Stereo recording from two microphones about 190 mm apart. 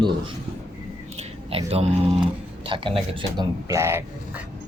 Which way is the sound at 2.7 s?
25° right (ahead or behind).